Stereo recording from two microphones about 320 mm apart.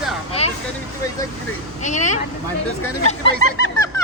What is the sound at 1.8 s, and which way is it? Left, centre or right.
Speech, left.